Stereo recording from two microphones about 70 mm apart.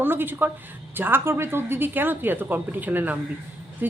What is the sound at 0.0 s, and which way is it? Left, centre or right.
Speech, right.